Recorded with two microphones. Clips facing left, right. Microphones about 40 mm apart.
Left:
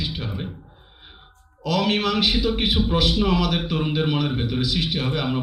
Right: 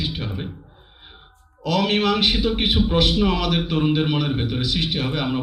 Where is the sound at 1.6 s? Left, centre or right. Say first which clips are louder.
Right 2 dB; right.